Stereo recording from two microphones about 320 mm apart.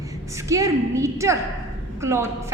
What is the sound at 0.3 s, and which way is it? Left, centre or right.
A woman's voice, centre.